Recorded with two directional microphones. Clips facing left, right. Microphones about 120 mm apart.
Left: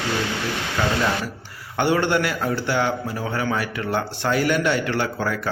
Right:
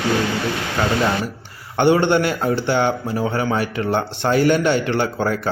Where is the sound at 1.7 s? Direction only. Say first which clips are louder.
Right 5 dB; 25° right (ahead or behind).